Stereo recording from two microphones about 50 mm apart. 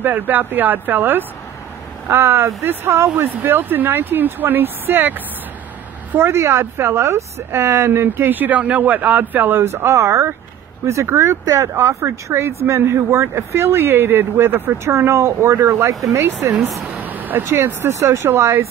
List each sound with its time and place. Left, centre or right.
0.0 s speech: right
3.2 s speech: right
6.1 s speech: right
7.0 s speech: right
9.8 s speech: right
10.9 s speech: right
17.0 s vehicle: right
17.5 s speech: right
18.2 s speech: right